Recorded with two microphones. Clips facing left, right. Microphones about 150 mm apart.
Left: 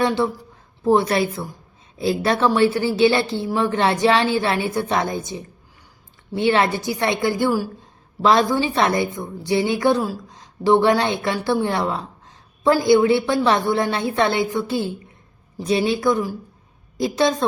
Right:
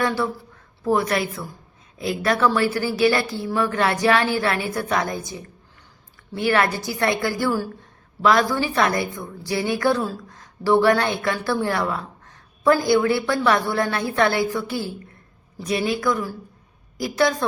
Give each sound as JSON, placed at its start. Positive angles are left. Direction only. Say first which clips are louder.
{"t": 0.9, "sound": "a woman's voice", "louder": "left 4 dB", "side_deg": 30}